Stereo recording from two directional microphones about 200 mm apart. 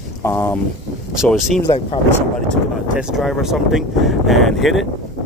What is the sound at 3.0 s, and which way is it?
Speech, centre (ahead or behind).